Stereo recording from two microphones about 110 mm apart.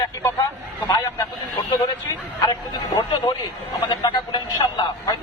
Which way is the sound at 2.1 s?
30° left (ahead or behind).